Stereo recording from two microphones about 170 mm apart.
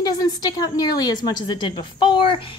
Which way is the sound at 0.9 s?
25° left (ahead or behind).